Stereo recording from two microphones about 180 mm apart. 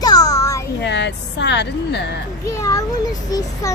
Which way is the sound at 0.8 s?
75° left (ahead or behind).